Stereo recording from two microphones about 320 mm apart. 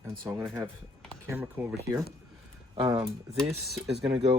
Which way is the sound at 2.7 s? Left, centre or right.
Centre.